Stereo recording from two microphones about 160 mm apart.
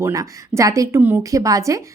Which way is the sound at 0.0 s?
20° right (ahead or behind).